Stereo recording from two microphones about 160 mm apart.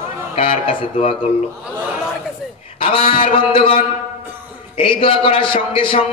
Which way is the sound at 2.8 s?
35° left (ahead or behind).